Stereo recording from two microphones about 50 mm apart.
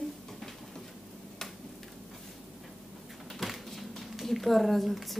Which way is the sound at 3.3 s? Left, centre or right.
Centre.